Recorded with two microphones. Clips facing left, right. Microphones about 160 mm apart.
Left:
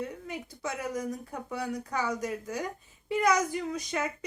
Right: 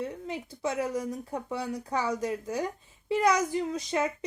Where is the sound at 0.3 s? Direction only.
25° right (ahead or behind).